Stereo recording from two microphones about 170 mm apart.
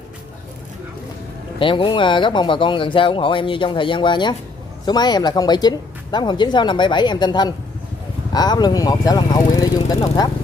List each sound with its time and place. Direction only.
1.6 s speech: 30° left (ahead or behind)